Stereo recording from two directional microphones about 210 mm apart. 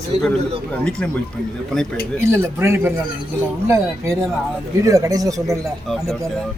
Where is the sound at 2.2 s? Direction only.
10° right (ahead or behind).